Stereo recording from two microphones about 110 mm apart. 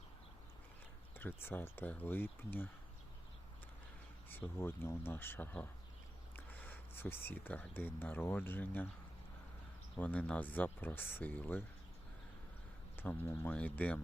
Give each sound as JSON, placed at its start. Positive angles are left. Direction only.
{"t": 1.1, "sound": "speech", "side_deg": 20}
{"t": 4.3, "sound": "speech", "side_deg": 20}
{"t": 10.0, "sound": "speech", "side_deg": 15}
{"t": 13.0, "sound": "speech", "side_deg": 20}